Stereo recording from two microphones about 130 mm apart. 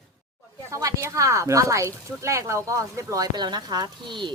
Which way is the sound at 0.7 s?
25° right (ahead or behind).